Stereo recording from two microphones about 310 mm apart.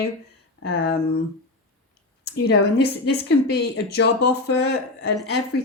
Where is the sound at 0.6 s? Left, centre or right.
Left.